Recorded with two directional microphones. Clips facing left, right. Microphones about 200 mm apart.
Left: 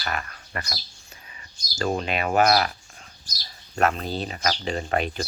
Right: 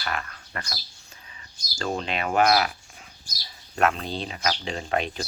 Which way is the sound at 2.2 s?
40° left (ahead or behind).